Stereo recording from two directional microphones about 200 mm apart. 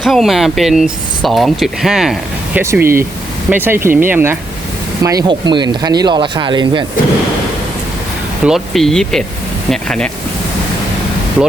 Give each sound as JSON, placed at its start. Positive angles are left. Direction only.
{"t": 0.0, "sound": "speech", "side_deg": 0}
{"t": 8.4, "sound": "speech", "side_deg": 0}